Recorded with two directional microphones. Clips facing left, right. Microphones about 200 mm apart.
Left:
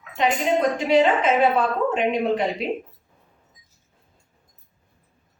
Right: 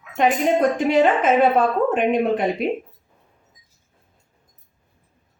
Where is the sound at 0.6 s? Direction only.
50° right (ahead or behind).